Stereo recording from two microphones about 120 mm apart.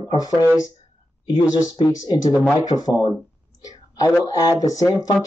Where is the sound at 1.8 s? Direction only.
30° left (ahead or behind).